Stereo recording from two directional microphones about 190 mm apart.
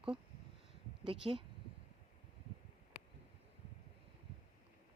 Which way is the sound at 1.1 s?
25° right (ahead or behind).